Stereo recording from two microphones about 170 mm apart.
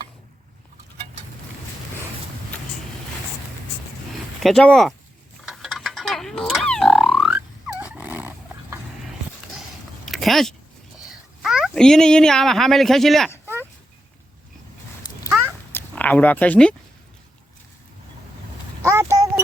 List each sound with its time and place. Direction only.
4.4 s speech: 5° left (ahead or behind)
5.5 s boing: centre (ahead or behind)
10.1 s a sound: centre (ahead or behind)
11.0 s speech: centre (ahead or behind)
15.7 s speech: 10° left (ahead or behind)
18.8 s a sound: 15° right (ahead or behind)